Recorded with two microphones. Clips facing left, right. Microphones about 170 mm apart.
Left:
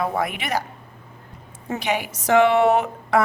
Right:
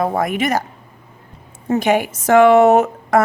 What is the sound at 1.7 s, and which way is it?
A woman's voice, 50° right (ahead or behind).